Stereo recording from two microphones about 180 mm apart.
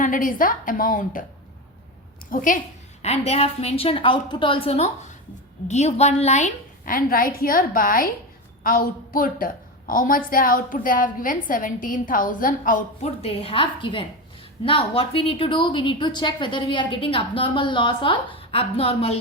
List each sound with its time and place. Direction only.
0.0 s a woman's voice: 50° left (ahead or behind)
2.3 s a woman's voice: 50° left (ahead or behind)
3.0 s a woman's voice: 35° left (ahead or behind)
13.0 s a woman's voice: 35° left (ahead or behind)